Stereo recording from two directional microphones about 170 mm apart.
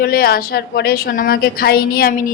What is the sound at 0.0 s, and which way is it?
A woman's voice, 65° left (ahead or behind).